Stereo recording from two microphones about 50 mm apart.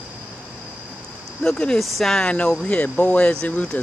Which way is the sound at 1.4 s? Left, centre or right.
Centre.